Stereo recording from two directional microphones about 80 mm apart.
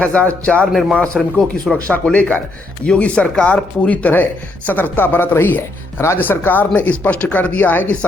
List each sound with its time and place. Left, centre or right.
0.0 s speech: centre
0.7 s a man's voice: centre; by 7.9 s left